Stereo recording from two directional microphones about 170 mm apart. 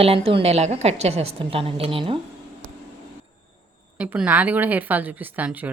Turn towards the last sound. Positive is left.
turn(degrees=-10)  # may be behind; listen again after turning